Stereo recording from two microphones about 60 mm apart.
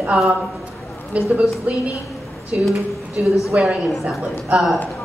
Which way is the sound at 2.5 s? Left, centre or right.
Centre.